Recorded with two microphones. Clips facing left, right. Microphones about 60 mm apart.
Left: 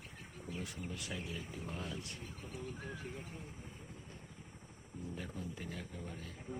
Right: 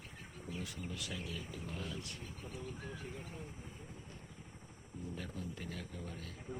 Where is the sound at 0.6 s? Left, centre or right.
Left.